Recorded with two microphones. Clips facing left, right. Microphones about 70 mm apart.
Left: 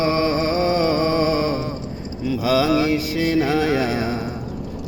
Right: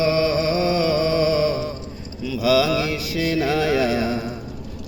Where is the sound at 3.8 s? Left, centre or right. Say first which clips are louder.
Right 1 dB; left.